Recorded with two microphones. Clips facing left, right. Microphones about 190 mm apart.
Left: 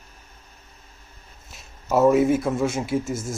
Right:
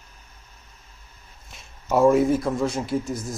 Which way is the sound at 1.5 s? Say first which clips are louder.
Even; centre (ahead or behind).